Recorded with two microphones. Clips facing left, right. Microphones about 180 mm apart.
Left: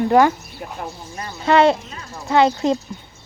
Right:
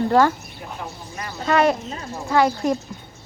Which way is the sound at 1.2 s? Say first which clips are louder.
Left 4 dB; 25° left (ahead or behind).